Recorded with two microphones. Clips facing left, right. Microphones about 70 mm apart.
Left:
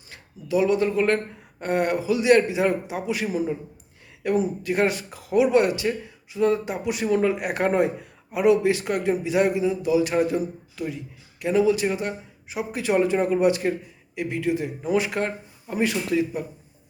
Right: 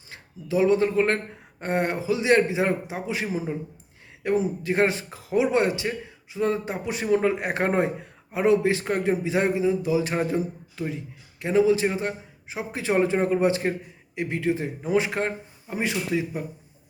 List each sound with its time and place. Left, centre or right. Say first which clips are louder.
0.1 s a man's voice: left 2 dB; right